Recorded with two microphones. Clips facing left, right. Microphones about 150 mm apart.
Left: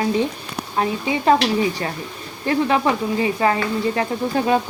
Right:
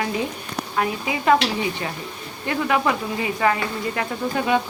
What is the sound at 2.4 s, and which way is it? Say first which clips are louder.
Speech: left 3 dB; 30° left (ahead or behind).